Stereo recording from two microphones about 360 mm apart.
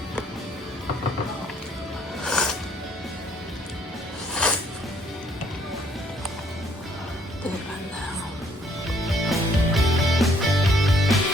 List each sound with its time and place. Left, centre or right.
2.2 s music: centre
8.9 s music: centre